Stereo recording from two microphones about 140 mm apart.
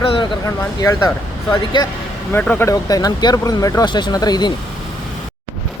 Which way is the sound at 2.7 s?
25° left (ahead or behind).